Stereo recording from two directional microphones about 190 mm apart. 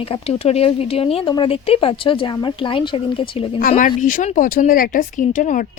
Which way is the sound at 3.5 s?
45° left (ahead or behind).